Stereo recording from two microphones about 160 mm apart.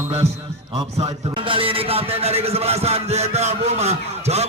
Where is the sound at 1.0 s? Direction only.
35° right (ahead or behind).